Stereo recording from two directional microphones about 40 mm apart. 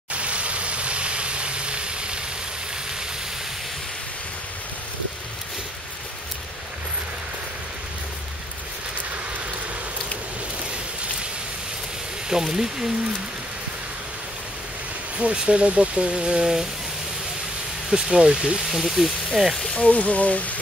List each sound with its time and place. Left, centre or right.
0.1 s vehicle: right
12.3 s speech: centre
15.1 s speech: right
17.8 s speech: centre
18.7 s speech: centre
19.6 s speech: left